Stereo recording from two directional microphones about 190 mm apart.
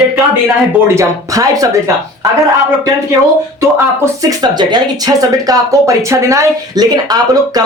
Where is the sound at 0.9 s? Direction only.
20° right (ahead or behind).